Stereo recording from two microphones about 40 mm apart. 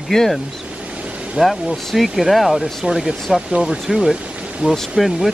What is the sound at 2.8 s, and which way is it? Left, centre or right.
Speech, centre.